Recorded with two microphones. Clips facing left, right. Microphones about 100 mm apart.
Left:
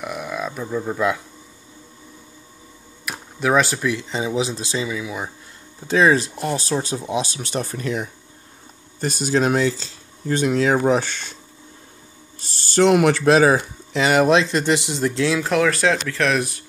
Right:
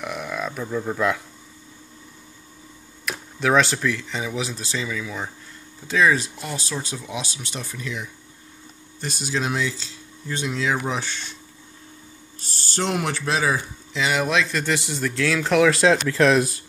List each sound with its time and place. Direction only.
0.0 s speech: 5° left (ahead or behind)
3.1 s speech: 5° left (ahead or behind)
5.9 s speech: 30° left (ahead or behind)
6.3 s speech: 45° left (ahead or behind)
7.3 s speech: 45° left (ahead or behind)
12.7 s speech: 75° left (ahead or behind); by 14.3 s 45° left (ahead or behind)
14.3 s speech: 30° left (ahead or behind)
15.3 s speech: centre (ahead or behind)
15.7 s speech: 20° right (ahead or behind)